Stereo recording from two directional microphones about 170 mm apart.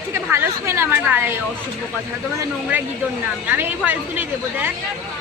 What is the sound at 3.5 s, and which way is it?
A woman's voice, 10° right (ahead or behind).